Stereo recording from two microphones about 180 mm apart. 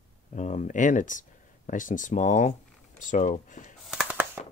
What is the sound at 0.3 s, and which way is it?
Speech, 45° left (ahead or behind).